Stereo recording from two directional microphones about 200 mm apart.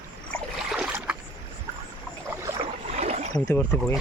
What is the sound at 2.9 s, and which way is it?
Rowboat, 35° right (ahead or behind).